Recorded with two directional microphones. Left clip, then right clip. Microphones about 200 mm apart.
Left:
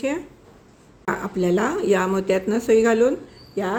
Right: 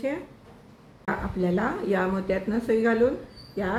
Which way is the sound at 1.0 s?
50° left (ahead or behind).